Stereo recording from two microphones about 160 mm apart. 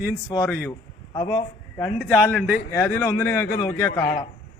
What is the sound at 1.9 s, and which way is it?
A man's voice, 5° left (ahead or behind).